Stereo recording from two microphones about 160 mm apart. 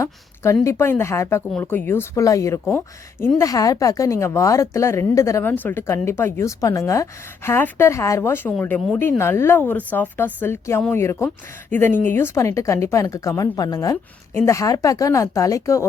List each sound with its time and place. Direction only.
0.6 s a woman's voice: 15° left (ahead or behind)